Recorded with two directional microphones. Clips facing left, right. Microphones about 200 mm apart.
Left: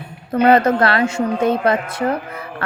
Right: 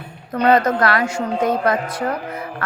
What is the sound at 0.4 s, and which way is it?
Speech, 25° left (ahead or behind).